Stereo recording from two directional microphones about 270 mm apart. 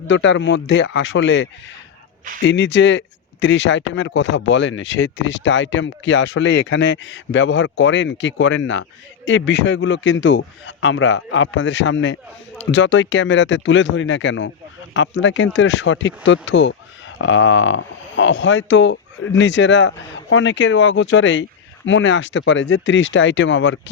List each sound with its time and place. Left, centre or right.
0.1 s speech: left